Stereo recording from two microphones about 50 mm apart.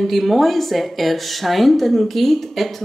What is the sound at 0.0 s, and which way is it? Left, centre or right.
Speech, centre.